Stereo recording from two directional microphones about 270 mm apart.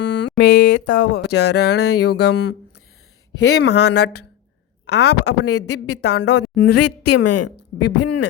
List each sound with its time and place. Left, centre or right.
0.0 s a sound: left
0.3 s a sound: left
0.9 s speech: left
5.5 s a woman's voice: left
6.1 s speech: left
6.7 s a woman's voice: left